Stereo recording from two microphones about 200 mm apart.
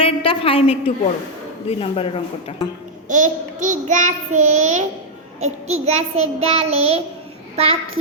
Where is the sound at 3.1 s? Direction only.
40° right (ahead or behind).